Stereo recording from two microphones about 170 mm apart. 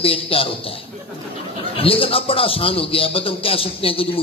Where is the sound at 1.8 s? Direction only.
35° left (ahead or behind).